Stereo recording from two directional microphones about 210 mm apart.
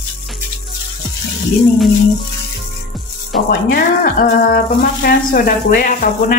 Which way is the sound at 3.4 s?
40° left (ahead or behind).